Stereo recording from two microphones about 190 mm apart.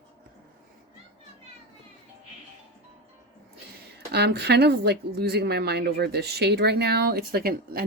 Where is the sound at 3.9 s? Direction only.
60° right (ahead or behind).